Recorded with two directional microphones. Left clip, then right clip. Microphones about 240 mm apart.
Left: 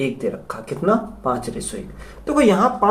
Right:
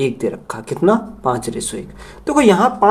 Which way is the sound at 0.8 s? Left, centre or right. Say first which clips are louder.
Right 4 dB; right.